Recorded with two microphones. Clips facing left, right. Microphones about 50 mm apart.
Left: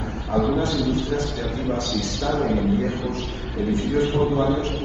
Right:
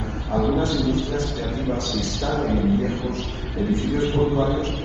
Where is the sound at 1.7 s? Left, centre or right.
Left.